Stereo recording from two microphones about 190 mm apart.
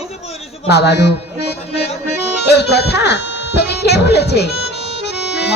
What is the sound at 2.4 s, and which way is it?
Speech, 60° left (ahead or behind).